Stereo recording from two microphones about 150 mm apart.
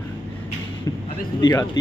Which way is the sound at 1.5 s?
20° left (ahead or behind).